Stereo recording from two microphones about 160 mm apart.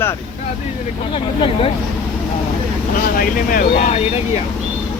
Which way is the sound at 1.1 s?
35° left (ahead or behind).